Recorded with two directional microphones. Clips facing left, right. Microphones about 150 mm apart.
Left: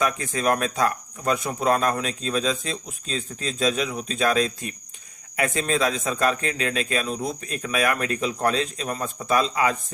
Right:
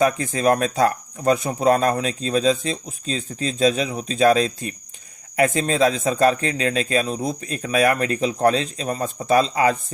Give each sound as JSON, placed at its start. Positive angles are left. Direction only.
{"t": 0.0, "sound": "speech", "side_deg": -35}